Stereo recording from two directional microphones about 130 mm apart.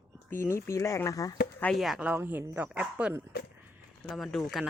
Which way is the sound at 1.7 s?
Centre (ahead or behind).